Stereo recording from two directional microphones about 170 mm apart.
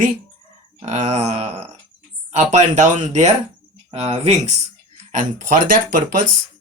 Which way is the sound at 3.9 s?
35° right (ahead or behind).